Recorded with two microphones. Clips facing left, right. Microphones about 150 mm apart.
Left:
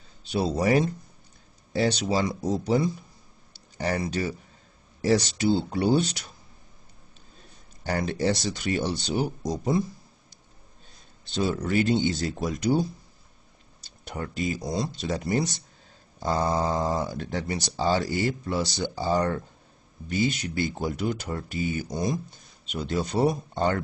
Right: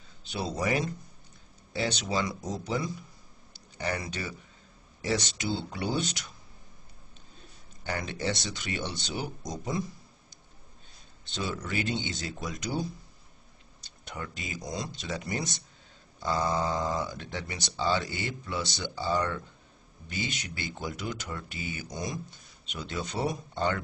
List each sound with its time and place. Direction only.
0.3 s speech: 35° left (ahead or behind)
7.8 s speech: 40° left (ahead or behind)
11.3 s speech: 40° left (ahead or behind)
14.1 s speech: 40° left (ahead or behind)